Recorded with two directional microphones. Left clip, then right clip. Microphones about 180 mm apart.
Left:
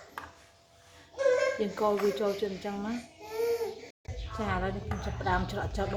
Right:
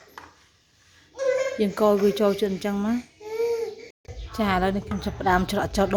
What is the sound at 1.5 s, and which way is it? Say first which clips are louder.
A woman's voice: right 8 dB; 55° right (ahead or behind).